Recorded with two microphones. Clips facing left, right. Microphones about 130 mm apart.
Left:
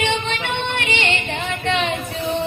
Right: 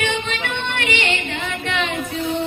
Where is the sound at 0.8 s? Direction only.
25° left (ahead or behind).